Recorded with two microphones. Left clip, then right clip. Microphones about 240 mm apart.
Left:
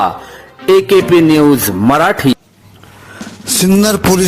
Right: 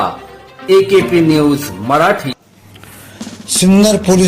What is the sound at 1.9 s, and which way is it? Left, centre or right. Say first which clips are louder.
Speech: even; left.